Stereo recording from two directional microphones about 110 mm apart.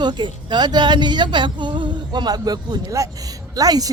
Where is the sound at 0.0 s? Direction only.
40° right (ahead or behind).